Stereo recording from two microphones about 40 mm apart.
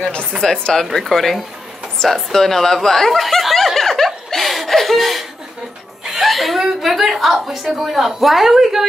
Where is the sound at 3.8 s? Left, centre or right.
Centre.